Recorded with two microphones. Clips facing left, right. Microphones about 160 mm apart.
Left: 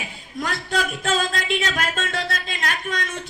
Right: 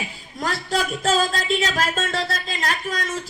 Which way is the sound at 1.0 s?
35° right (ahead or behind).